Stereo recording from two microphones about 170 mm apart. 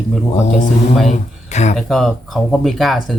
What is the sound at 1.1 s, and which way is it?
Speech, 40° left (ahead or behind).